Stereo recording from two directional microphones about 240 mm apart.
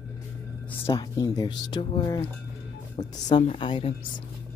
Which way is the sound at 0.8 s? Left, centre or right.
Centre.